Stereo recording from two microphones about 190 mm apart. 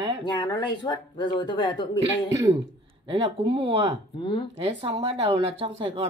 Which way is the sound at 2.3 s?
20° right (ahead or behind).